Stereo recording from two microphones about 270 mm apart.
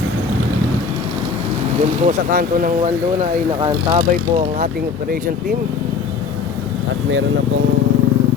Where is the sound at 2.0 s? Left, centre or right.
Right.